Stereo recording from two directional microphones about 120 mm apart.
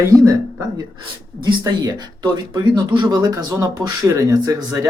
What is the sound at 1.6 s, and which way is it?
Speech, 35° right (ahead or behind).